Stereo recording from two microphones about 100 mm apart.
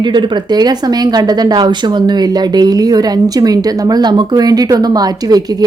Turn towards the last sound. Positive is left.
turn(degrees=-40)  # may be behind; listen again after turning